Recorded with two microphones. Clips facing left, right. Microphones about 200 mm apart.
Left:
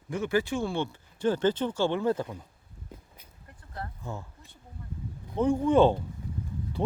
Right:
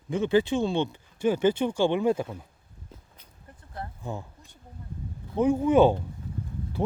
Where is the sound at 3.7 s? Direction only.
20° right (ahead or behind).